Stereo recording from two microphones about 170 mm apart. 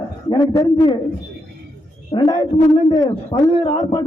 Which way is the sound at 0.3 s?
25° left (ahead or behind).